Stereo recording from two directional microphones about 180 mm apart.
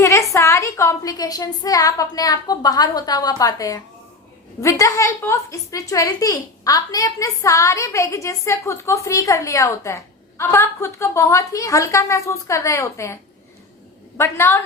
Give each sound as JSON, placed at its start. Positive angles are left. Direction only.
{"t": 0.0, "sound": "a woman's voice", "side_deg": 15}
{"t": 14.2, "sound": "a woman's voice", "side_deg": 15}